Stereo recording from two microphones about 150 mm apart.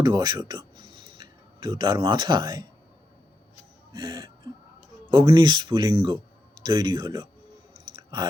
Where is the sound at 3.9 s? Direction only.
30° right (ahead or behind).